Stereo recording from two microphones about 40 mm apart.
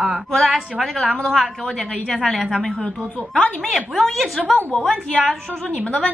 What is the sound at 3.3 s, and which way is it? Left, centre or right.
Speech, left.